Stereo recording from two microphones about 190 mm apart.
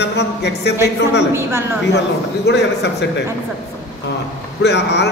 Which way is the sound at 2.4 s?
60° left (ahead or behind).